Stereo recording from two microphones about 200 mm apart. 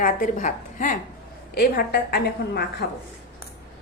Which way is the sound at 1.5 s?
50° left (ahead or behind).